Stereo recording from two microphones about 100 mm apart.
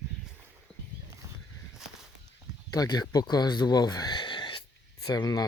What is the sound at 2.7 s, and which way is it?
Speech, 40° left (ahead or behind).